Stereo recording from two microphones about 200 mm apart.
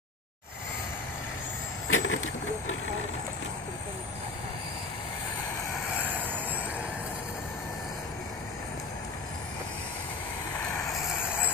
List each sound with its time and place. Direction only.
1.9 s vehicle: 80° left
5.9 s vehicle: 10° right (ahead or behind)